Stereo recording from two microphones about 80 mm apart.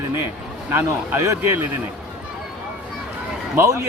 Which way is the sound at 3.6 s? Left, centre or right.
Right.